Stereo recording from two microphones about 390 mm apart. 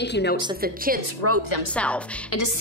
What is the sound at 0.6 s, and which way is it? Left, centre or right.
Speech, right.